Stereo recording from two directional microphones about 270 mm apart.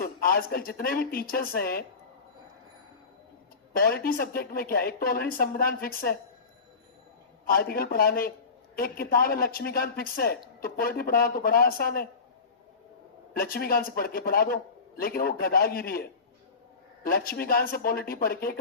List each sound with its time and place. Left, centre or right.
0.0 s a man's voice: left
3.7 s a man's voice: left
7.4 s a man's voice: left
13.3 s a man's voice: left